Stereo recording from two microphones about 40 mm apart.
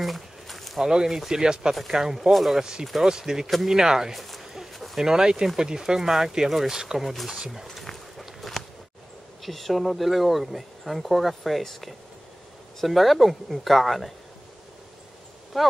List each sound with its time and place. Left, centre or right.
0.0 s a sound: centre
0.7 s speech: centre
2.6 s speech: centre
4.1 s a sound: centre
5.0 s speech: centre
7.1 s speech: centre
7.3 s speech: centre
7.8 s walk: centre
9.4 s speech: centre
15.5 s speech: centre